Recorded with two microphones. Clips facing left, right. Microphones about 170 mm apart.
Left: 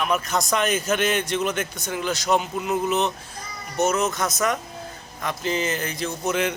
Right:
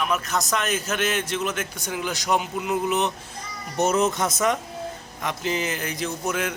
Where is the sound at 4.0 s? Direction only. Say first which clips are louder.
Right 2 dB; 30° right (ahead or behind).